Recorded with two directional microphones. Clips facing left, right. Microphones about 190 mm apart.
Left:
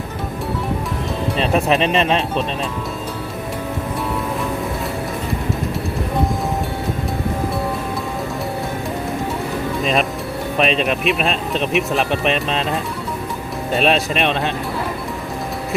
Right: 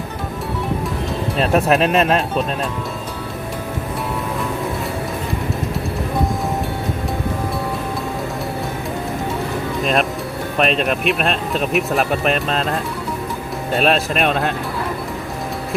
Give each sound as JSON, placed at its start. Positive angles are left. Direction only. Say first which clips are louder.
{"t": 1.4, "sound": "speech", "louder": "right 2 dB", "side_deg": 0}
{"t": 9.8, "sound": "speech", "louder": "right 1 dB", "side_deg": 0}